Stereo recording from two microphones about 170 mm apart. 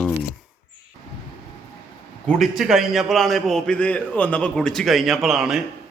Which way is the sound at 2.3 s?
Centre (ahead or behind).